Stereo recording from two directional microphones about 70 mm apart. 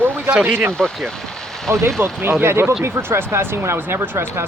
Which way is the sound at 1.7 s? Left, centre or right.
Right.